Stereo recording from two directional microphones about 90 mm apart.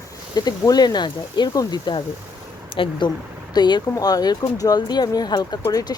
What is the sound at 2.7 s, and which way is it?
Speech, 80° left.